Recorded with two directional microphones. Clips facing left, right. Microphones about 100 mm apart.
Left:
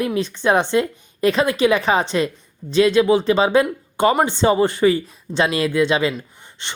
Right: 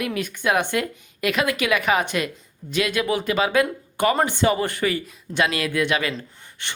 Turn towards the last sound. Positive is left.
turn(degrees=20)  # may be behind; listen again after turning